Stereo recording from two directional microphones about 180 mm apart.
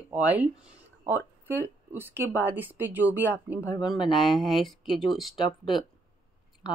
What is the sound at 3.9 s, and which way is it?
Speech, 25° left (ahead or behind).